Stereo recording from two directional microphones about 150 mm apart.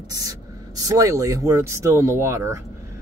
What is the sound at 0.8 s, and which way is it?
Speech, 20° right (ahead or behind).